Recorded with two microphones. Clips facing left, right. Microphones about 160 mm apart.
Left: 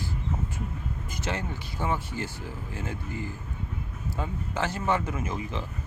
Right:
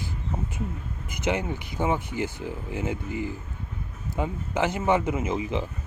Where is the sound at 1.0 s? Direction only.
20° right (ahead or behind).